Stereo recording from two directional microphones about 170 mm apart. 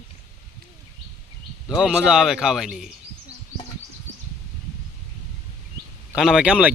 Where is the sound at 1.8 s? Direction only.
5° right (ahead or behind).